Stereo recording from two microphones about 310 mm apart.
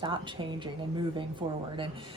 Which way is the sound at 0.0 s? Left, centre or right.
Centre.